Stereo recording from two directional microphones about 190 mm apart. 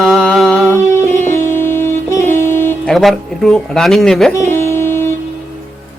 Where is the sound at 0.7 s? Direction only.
15° left (ahead or behind).